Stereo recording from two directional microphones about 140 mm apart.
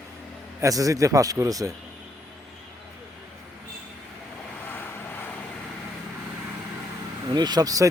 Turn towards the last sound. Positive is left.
turn(degrees=-25)  # may be behind; listen again after turning